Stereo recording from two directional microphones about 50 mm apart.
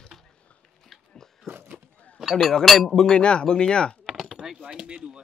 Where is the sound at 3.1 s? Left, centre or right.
Centre.